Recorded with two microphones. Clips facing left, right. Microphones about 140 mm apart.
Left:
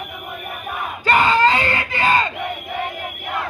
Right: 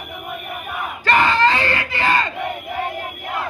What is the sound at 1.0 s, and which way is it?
Screaming, 15° left (ahead or behind).